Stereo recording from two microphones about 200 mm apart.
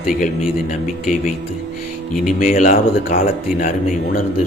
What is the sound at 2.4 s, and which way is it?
A man's voice, 40° left (ahead or behind).